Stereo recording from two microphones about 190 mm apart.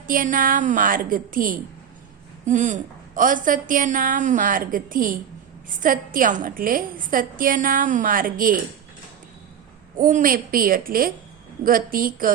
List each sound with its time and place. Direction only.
0.1 s a woman's voice: 45° right (ahead or behind)
10.0 s a woman's voice: 45° right (ahead or behind)